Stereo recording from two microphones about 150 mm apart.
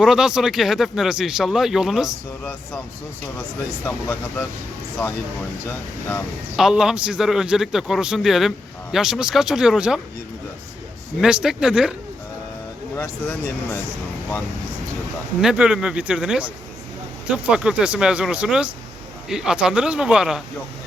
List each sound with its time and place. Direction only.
0.0 s a man's voice: 5° right (ahead or behind)
3.8 s speech: 15° left (ahead or behind)
6.6 s a man's voice: 5° right (ahead or behind)
11.2 s a man's voice: 5° right (ahead or behind)
13.2 s speech: 10° left (ahead or behind)
15.4 s a man's voice: 5° right (ahead or behind)